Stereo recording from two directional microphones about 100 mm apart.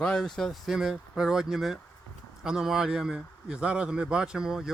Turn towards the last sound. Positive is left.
turn(degrees=-5)  # may be behind; listen again after turning